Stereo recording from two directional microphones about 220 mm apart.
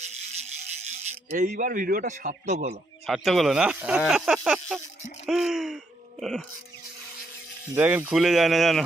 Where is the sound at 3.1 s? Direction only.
Centre (ahead or behind).